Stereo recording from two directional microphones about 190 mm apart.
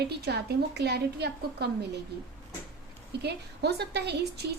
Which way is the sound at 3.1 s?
60° right (ahead or behind).